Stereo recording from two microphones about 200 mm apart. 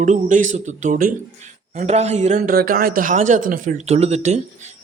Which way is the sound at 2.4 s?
45° right (ahead or behind).